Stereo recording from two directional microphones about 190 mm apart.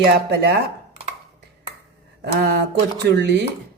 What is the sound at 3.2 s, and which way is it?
Music, 60° right (ahead or behind).